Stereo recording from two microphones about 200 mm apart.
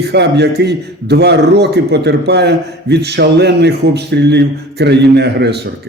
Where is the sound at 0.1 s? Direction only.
55° right (ahead or behind).